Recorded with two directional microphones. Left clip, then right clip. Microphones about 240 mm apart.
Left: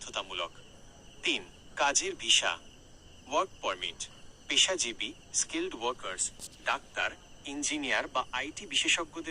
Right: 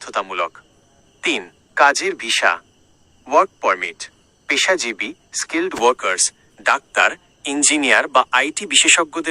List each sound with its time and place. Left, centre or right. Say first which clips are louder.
0.1 s speech: right 14 dB; right